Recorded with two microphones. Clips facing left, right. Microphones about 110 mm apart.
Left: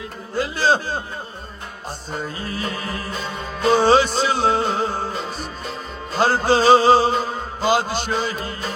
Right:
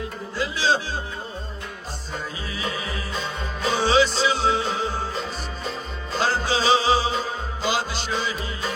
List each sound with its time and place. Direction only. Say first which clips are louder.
0.3 s speech: left 4 dB; 50° left (ahead or behind)
2.2 s music: left 3 dB; 50° left (ahead or behind)
6.1 s music: left 6 dB; 50° left (ahead or behind)